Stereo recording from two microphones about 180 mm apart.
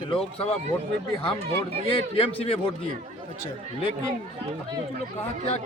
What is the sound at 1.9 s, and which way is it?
Speech, 30° left (ahead or behind).